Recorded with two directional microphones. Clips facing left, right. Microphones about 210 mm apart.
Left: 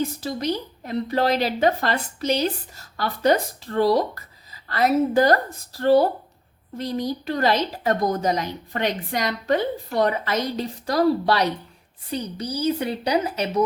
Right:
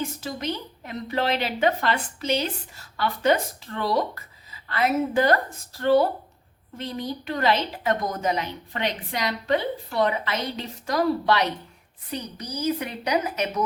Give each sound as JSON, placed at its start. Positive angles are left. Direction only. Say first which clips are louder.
{"t": 0.2, "sound": "a woman's voice", "louder": "left 4 dB", "side_deg": 35}